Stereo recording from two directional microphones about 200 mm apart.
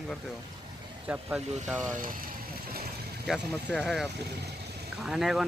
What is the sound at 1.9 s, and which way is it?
Vehicle, 45° right (ahead or behind).